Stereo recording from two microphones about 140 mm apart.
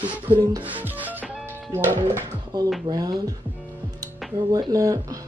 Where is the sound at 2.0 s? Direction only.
25° right (ahead or behind).